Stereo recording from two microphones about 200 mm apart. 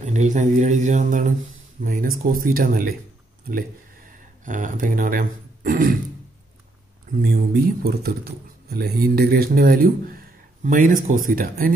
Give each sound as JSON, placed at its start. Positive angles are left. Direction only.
{"t": 0.0, "sound": "a man's voice", "side_deg": -35}
{"t": 4.5, "sound": "speech", "side_deg": -40}
{"t": 7.2, "sound": "speech", "side_deg": -50}